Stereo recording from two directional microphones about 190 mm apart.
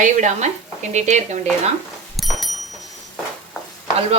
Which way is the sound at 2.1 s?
Centre (ahead or behind).